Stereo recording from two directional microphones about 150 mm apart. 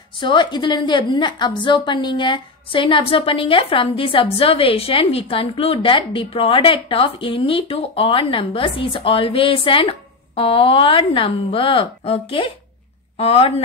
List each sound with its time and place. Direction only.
0.2 s a woman's voice: 30° left (ahead or behind)